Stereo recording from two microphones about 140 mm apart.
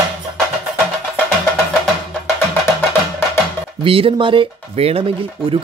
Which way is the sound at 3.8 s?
40° right (ahead or behind).